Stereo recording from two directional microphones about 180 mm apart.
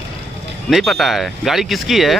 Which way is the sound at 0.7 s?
Centre (ahead or behind).